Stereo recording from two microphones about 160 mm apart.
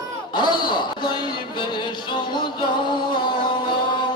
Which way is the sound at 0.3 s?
30° left (ahead or behind).